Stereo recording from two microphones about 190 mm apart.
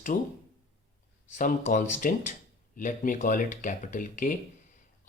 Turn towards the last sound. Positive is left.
turn(degrees=45)  # may be behind; listen again after turning